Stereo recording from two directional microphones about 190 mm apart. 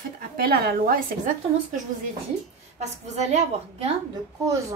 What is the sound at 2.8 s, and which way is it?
Speech, 35° right (ahead or behind).